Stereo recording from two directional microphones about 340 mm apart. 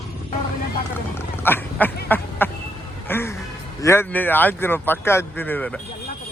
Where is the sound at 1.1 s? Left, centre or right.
Centre.